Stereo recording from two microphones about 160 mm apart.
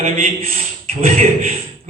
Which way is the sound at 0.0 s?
40° right (ahead or behind).